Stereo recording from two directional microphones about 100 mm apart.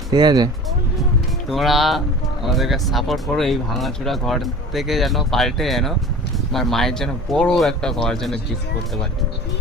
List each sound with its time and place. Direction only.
0.1 s speech: 45° right (ahead or behind)
1.5 s speech: centre (ahead or behind)